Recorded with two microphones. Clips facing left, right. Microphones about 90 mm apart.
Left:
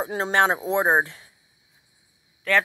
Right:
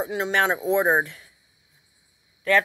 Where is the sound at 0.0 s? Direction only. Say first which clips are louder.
Left 2 dB; 35° left (ahead or behind).